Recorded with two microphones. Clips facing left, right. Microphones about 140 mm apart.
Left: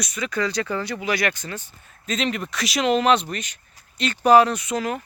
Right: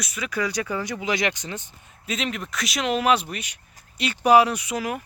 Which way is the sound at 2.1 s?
Centre (ahead or behind).